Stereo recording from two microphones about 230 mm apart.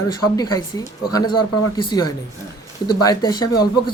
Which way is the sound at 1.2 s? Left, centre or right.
Left.